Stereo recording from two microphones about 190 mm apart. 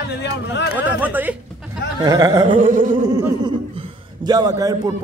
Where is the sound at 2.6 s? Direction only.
45° right (ahead or behind).